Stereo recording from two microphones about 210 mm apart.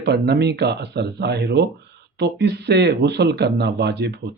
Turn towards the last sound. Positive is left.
turn(degrees=-55)  # may be behind; listen again after turning